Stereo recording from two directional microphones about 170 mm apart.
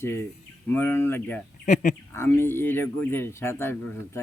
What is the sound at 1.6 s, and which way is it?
Speech, 45° left (ahead or behind).